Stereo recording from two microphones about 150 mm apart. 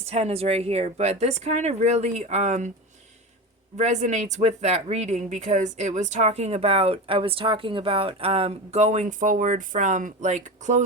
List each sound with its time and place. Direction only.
0.0 s speech: 45° right (ahead or behind)
3.8 s speech: 50° right (ahead or behind)